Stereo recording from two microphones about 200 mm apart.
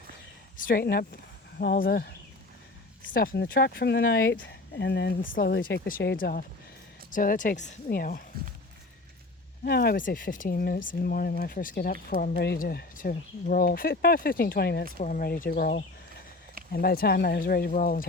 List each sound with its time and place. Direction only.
0.5 s speech: 45° left (ahead or behind)
9.6 s speech: 50° left (ahead or behind)
14.9 s speech: 40° left (ahead or behind)